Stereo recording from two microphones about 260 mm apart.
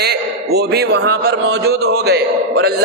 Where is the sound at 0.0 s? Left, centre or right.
Right.